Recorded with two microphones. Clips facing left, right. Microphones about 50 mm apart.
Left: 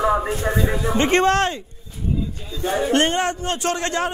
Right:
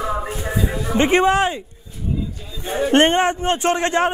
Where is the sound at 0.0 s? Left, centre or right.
Centre.